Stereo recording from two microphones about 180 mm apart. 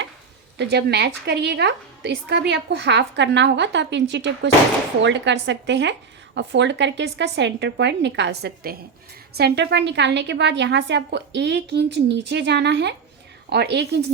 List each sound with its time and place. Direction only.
0.6 s a woman's voice: 65° right (ahead or behind)